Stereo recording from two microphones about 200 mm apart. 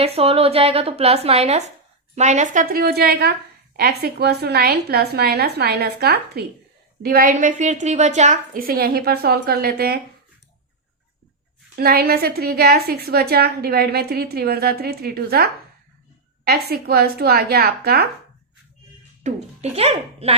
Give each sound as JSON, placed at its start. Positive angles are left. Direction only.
{"t": 0.0, "sound": "a woman's voice", "side_deg": -30}
{"t": 11.8, "sound": "a woman's voice", "side_deg": -50}
{"t": 19.2, "sound": "a child's voice", "side_deg": -30}